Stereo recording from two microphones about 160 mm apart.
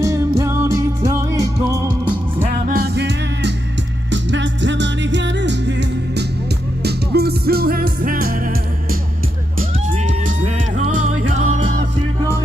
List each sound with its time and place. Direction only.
0.0 s music: 20° right (ahead or behind)
2.6 s music: 70° right (ahead or behind)
10.2 s music: 50° right (ahead or behind)